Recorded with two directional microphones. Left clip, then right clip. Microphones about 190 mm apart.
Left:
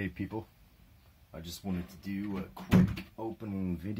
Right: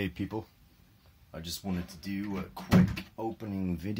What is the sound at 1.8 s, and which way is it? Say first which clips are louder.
Speech: right 2 dB; 25° right (ahead or behind).